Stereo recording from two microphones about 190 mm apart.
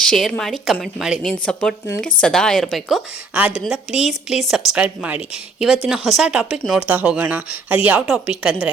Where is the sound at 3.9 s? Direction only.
35° left (ahead or behind).